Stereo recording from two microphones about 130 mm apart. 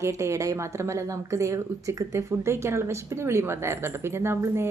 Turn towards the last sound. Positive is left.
turn(degrees=-20)  # may be behind; listen again after turning